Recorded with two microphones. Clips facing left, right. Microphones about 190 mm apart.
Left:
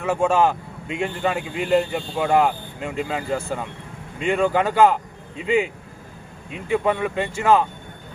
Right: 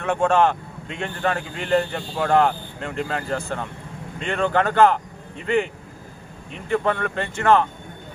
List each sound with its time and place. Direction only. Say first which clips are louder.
0.0 s a man's voice: even; 5° left (ahead or behind)